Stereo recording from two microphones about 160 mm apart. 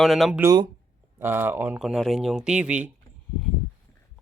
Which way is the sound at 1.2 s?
15° right (ahead or behind).